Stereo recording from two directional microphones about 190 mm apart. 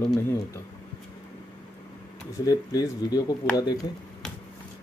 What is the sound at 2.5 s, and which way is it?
Speech, 20° left (ahead or behind).